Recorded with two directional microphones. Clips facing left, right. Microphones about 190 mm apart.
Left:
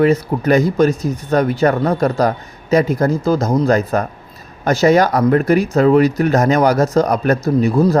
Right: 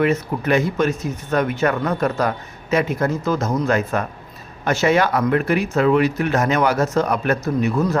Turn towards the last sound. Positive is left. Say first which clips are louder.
# left 6 dB
turn(degrees=35)  # may be behind; listen again after turning